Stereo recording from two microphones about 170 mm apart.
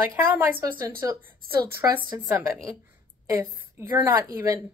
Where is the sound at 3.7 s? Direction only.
15° right (ahead or behind).